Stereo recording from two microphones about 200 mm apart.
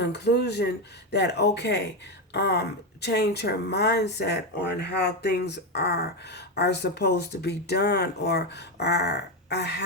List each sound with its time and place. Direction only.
0.0 s speech: 55° left (ahead or behind)